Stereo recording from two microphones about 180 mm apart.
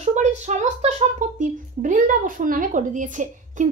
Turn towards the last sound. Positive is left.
turn(degrees=-45)  # may be behind; listen again after turning